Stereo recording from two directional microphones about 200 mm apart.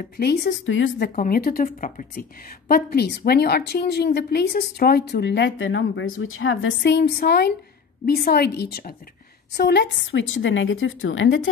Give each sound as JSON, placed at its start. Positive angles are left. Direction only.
{"t": 0.2, "sound": "a woman's voice", "side_deg": 55}
{"t": 1.1, "sound": "a woman's voice", "side_deg": 45}